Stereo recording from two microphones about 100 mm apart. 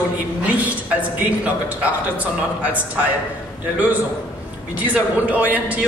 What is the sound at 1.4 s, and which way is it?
A man's voice, 15° right (ahead or behind).